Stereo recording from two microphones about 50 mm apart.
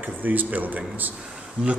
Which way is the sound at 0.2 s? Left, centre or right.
Right.